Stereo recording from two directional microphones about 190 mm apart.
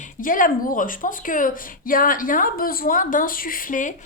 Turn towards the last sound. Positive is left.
turn(degrees=45)  # may be behind; listen again after turning